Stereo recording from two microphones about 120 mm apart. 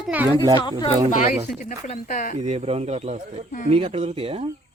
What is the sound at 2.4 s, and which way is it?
Speech, 60° right (ahead or behind).